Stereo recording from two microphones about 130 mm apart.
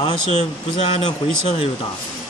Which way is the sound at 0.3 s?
60° left (ahead or behind).